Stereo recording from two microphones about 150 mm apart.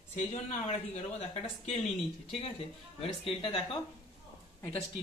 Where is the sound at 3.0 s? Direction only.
40° left (ahead or behind).